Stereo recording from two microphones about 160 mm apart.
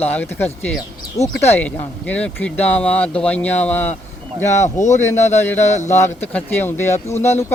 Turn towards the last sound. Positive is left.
turn(degrees=15)  # may be behind; listen again after turning